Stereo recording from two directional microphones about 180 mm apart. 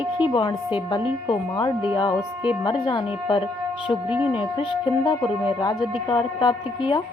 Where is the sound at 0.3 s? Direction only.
20° left (ahead or behind).